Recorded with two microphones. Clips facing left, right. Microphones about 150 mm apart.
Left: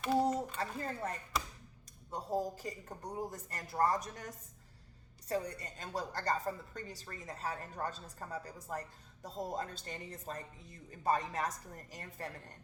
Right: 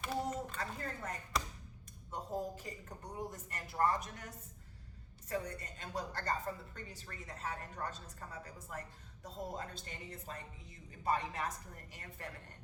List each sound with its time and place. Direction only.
0.3 s a woman's voice: 35° left (ahead or behind)
1.3 s a sound: centre (ahead or behind)
2.0 s a woman's voice: 35° left (ahead or behind)
5.3 s a woman's voice: 35° left (ahead or behind)